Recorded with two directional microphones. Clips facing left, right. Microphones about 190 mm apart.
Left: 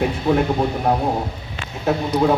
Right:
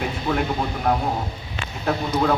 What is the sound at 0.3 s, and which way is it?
Speech, 25° left (ahead or behind).